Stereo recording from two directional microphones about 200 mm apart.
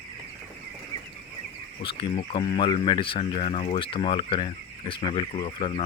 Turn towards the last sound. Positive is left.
turn(degrees=25)  # may be behind; listen again after turning